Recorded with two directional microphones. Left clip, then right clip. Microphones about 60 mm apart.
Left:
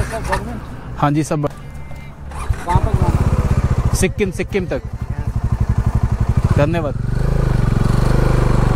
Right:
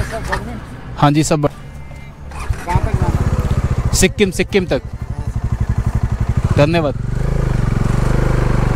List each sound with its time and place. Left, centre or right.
0.0 s vehicle: left
0.9 s speech: right
2.3 s vehicle: left
3.9 s speech: right
5.7 s vehicle: left
6.5 s speech: right
7.2 s vehicle: left